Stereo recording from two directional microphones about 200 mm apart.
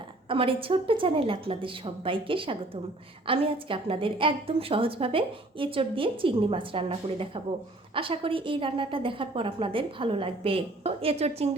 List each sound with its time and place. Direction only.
0.3 s a woman's voice: 25° right (ahead or behind)